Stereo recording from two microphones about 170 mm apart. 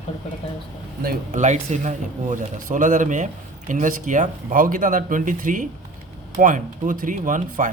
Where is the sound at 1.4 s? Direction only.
45° right (ahead or behind).